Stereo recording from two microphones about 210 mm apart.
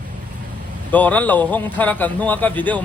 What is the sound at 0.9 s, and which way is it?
A man's voice, 10° left (ahead or behind).